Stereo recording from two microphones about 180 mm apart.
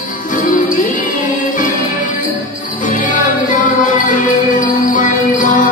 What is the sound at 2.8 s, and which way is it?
Music, 45° left (ahead or behind).